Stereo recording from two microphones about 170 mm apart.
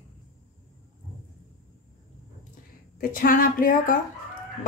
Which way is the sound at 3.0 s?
55° left (ahead or behind).